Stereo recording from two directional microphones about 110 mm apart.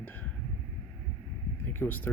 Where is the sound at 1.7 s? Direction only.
15° left (ahead or behind).